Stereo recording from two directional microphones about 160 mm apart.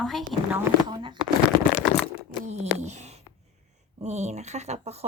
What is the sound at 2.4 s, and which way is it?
Speech, 45° right (ahead or behind).